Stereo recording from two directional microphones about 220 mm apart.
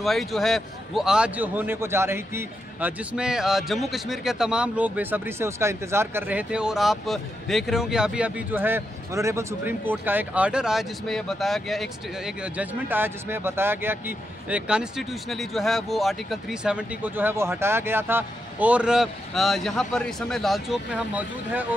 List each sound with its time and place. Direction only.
0.0 s a man's voice: centre (ahead or behind)